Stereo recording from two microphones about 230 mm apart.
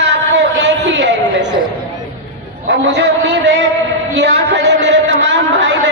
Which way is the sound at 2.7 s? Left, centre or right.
Right.